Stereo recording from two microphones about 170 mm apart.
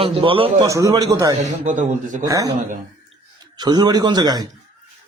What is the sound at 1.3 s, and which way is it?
Speech, 45° right (ahead or behind).